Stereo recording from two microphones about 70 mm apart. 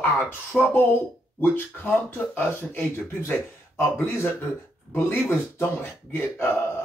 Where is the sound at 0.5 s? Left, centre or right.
Centre.